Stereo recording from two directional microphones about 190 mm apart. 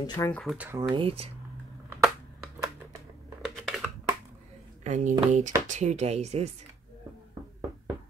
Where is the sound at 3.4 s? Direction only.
Centre (ahead or behind).